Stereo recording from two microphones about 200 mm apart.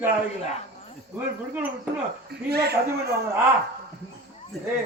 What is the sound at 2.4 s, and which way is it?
Speech, 55° right (ahead or behind).